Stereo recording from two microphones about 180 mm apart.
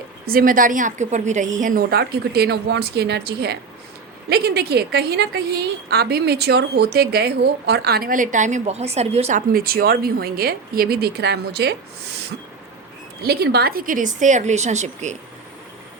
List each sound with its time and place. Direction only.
0.3 s a woman's voice: 55° right (ahead or behind); by 9.4 s 35° right (ahead or behind)
9.5 s a woman's voice: 55° right (ahead or behind)
13.2 s a woman's voice: 65° right (ahead or behind); by 15.1 s 40° right (ahead or behind)